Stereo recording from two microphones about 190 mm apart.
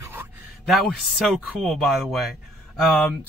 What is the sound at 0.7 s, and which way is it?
Speech, centre (ahead or behind).